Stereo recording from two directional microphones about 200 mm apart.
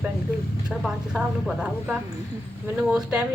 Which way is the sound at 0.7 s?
Centre (ahead or behind).